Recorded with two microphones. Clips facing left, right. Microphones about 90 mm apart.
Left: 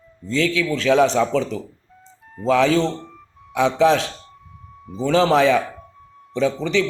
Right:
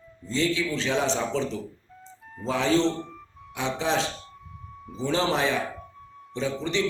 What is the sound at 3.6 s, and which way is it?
A man's voice, 70° left (ahead or behind).